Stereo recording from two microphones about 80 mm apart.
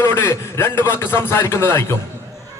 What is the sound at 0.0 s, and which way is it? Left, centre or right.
A man's voice, left.